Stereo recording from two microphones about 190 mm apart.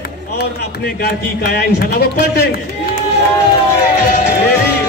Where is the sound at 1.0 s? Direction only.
55° left (ahead or behind).